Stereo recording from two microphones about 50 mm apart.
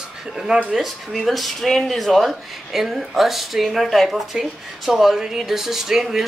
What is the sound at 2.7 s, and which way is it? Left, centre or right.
Speech, centre.